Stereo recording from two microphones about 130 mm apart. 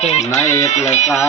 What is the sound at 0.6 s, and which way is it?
Speech, 60° left (ahead or behind).